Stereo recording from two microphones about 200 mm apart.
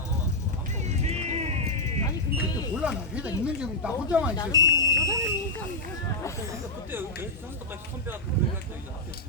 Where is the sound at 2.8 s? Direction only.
5° right (ahead or behind).